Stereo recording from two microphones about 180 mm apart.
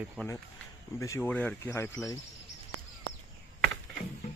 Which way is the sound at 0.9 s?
15° left (ahead or behind).